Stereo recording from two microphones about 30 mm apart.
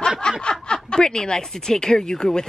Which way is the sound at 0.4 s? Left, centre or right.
Left.